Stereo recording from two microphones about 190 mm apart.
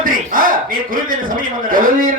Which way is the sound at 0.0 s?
45° right (ahead or behind).